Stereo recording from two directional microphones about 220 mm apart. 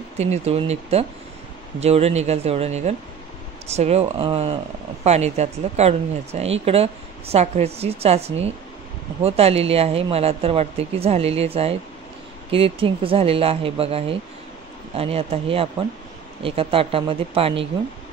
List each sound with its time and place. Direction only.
0.2 s speech: 30° right (ahead or behind)